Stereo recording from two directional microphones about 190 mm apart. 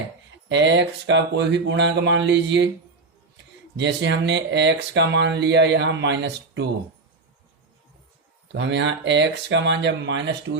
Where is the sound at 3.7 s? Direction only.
65° right (ahead or behind).